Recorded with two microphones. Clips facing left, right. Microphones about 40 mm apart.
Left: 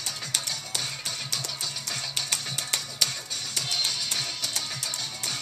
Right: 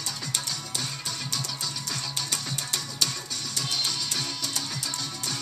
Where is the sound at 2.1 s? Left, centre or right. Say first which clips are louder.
Left 1 dB; left.